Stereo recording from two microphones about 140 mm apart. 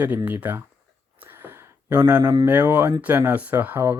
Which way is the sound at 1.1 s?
15° right (ahead or behind).